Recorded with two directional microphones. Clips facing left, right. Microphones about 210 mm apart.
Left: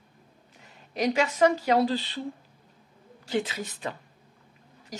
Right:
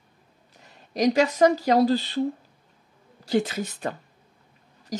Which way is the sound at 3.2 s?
40° right (ahead or behind).